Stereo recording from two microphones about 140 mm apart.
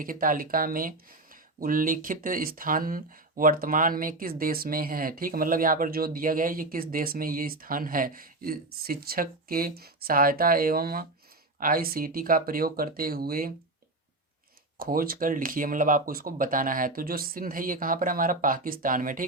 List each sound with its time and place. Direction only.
0.0 s speech: 80° right
14.8 s speech: 90° right; by 19.2 s 75° right (ahead or behind)